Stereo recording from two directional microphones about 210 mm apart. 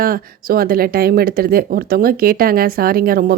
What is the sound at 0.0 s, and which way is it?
Speech, 45° right (ahead or behind).